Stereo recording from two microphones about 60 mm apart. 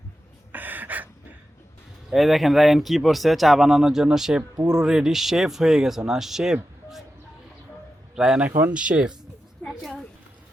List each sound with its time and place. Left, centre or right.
0.5 s a sound: right
2.1 s speech: centre
8.1 s speech: centre
8.4 s speech: right
8.7 s speech: centre
9.6 s a sound: centre